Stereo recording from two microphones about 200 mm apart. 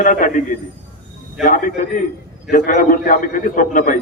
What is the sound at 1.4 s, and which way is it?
A man's voice, 40° left (ahead or behind).